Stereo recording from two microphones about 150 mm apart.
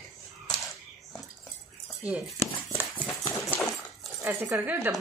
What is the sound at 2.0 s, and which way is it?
Speech, 10° right (ahead or behind).